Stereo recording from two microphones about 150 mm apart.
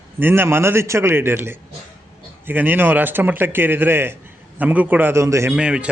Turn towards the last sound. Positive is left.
turn(degrees=-5)  # may be behind; listen again after turning